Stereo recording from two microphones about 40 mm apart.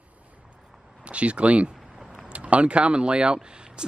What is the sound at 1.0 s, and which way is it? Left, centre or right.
Speech, right.